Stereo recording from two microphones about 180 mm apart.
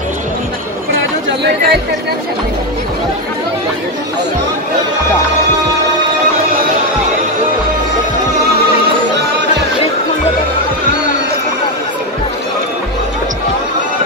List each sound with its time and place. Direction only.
0.9 s chatter: 65° right (ahead or behind)